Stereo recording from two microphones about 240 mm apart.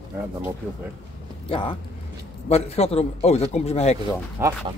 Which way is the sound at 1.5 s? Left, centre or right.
Left.